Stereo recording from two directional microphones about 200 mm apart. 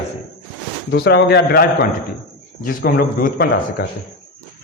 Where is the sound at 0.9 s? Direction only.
55° left (ahead or behind).